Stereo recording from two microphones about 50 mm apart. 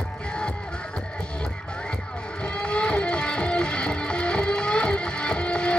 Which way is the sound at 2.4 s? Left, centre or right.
Left.